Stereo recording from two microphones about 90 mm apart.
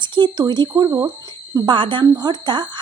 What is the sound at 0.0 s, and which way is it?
A woman's voice, 60° right (ahead or behind).